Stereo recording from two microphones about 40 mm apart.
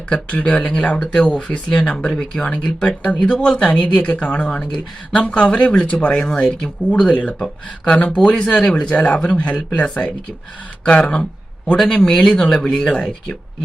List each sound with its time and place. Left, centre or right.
0.1 s speech: left
3.7 s speech: left
8.1 s speech: left